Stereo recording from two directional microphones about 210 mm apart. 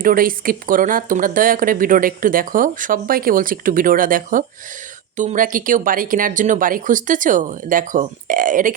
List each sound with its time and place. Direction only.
0.0 s speech: 40° right (ahead or behind)